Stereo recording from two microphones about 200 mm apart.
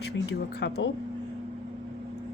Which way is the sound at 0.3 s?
60° left (ahead or behind).